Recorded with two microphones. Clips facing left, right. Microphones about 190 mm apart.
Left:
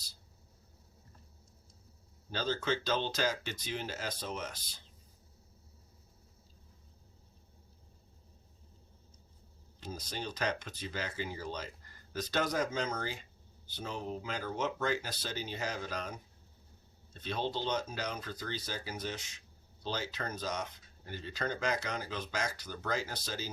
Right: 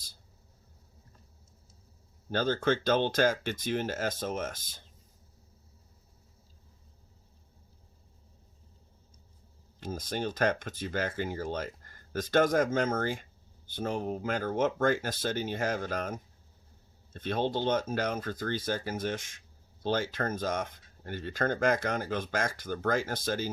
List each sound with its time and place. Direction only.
2.3 s speech: 55° right (ahead or behind)
9.8 s speech: 50° right (ahead or behind)